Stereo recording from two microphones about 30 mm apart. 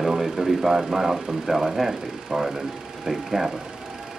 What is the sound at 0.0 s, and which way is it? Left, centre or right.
Speech, centre.